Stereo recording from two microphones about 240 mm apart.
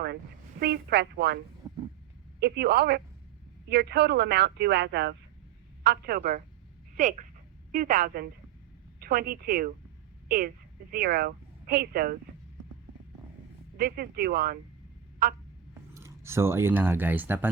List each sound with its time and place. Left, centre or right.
0.6 s speech: right
1.6 s a sound: centre
2.4 s speech: right
13.7 s speech: right
16.0 s speech: centre